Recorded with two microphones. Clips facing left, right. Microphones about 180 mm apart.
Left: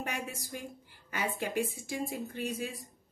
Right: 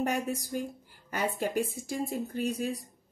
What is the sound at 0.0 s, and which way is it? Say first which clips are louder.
A woman's voice: right 8 dB; 40° right (ahead or behind).